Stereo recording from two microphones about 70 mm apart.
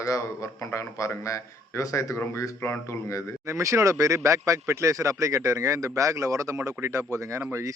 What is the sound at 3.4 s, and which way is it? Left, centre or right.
Speech, right.